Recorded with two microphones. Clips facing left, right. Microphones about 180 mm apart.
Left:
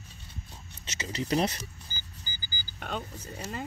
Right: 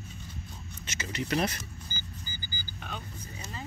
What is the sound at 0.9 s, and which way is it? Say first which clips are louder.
Speech: left 2 dB; 35° left (ahead or behind).